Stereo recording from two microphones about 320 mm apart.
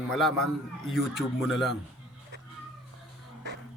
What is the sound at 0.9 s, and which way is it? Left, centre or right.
Mantra, centre.